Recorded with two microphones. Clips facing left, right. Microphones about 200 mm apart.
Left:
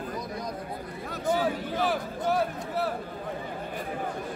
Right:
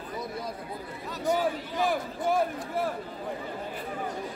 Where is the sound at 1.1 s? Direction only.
50° left (ahead or behind).